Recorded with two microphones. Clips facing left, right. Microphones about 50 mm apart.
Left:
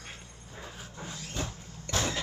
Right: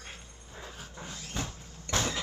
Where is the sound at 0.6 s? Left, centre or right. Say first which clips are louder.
Left 1 dB; centre.